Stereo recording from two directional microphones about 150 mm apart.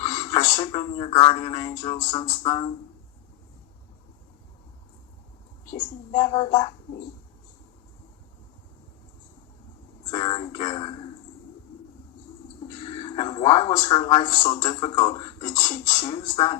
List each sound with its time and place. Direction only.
0.0 s music: 25° left (ahead or behind)
0.5 s speech: 35° left (ahead or behind)
6.1 s speech: 30° left (ahead or behind)
10.1 s speech: 35° left (ahead or behind)
12.8 s speech: 35° left (ahead or behind)